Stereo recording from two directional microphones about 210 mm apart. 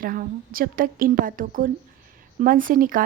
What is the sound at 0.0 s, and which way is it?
A woman's voice, 40° right (ahead or behind).